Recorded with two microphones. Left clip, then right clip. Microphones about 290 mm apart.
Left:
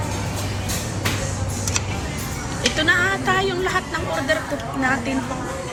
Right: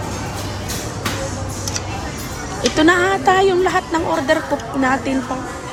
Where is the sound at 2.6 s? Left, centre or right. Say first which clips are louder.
Right 4 dB; centre.